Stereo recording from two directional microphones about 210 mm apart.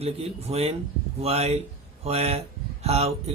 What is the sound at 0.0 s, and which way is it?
Speech, 30° right (ahead or behind).